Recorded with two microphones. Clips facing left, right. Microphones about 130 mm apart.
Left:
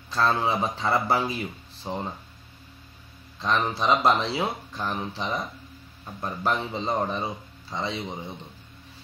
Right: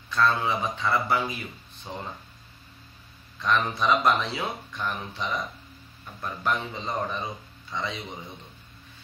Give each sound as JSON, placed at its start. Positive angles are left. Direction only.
{"t": 0.1, "sound": "speech", "side_deg": 35}
{"t": 3.3, "sound": "speech", "side_deg": 30}